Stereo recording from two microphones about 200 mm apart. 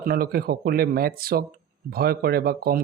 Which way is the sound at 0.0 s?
50° right (ahead or behind).